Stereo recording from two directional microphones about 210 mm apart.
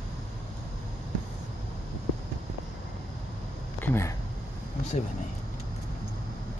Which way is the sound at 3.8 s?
10° left (ahead or behind).